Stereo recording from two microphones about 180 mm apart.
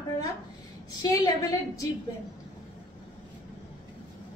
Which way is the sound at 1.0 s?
20° left (ahead or behind).